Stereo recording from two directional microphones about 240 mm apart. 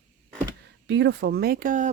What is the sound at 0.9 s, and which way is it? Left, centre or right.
Speech, right.